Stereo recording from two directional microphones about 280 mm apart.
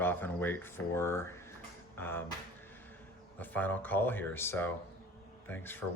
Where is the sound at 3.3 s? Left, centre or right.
Centre.